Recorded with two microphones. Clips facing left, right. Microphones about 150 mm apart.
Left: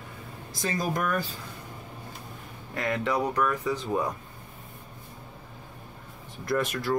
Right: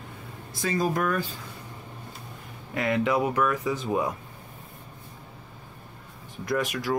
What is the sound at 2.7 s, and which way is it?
Speech, 5° right (ahead or behind).